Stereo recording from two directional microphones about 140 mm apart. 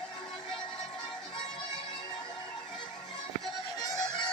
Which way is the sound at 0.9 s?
35° left (ahead or behind).